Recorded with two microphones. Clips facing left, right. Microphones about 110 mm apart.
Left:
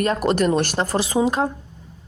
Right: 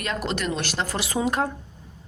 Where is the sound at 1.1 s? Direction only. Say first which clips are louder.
Left 4 dB; 20° left (ahead or behind).